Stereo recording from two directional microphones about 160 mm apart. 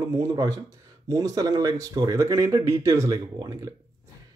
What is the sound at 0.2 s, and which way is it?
A man's voice, 20° right (ahead or behind).